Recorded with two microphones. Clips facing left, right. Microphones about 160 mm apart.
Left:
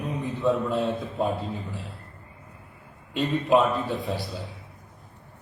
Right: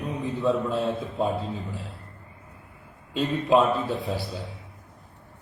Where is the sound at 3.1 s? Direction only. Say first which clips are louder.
Even; centre (ahead or behind).